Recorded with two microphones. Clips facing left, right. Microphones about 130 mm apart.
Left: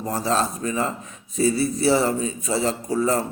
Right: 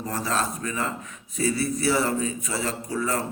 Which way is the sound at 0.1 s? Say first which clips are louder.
Left 5 dB; 30° left (ahead or behind).